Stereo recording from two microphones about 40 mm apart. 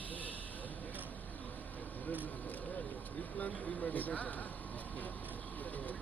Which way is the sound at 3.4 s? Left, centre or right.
Left.